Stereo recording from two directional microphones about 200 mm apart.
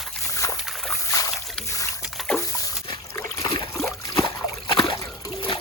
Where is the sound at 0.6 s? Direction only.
Centre (ahead or behind).